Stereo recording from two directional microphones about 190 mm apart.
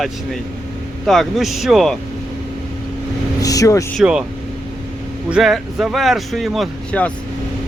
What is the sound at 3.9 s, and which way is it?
Speech, 5° right (ahead or behind).